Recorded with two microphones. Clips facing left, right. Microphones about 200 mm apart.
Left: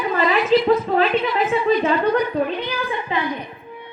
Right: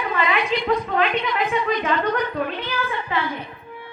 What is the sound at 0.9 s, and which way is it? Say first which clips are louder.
Speech: left 3 dB; 35° left (ahead or behind).